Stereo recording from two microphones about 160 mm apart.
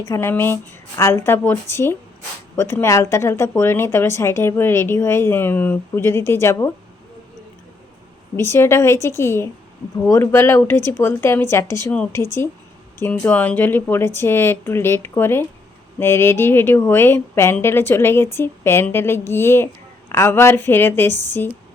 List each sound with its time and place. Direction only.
0.0 s speech: 15° left (ahead or behind)
8.4 s speech: 15° left (ahead or behind)
21.1 s speech: 50° right (ahead or behind)